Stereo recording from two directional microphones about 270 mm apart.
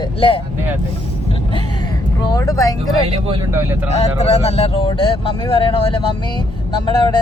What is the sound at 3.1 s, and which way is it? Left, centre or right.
Speech, centre.